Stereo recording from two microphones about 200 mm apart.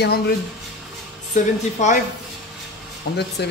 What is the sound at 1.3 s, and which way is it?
Speech, 40° left (ahead or behind).